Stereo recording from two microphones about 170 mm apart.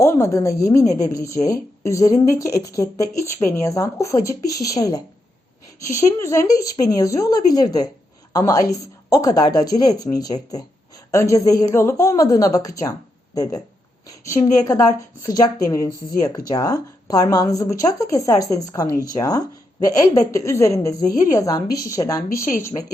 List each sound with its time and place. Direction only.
0.0 s a woman's voice: 15° left (ahead or behind)